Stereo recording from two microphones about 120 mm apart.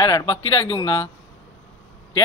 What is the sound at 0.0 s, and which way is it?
Speech, 35° left (ahead or behind).